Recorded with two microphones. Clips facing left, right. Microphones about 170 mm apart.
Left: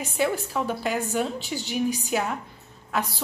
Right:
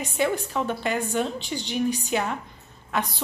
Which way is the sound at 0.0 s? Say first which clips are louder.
Even; 5° left (ahead or behind).